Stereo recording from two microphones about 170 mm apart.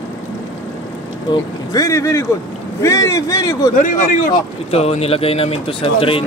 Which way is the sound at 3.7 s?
50° left (ahead or behind).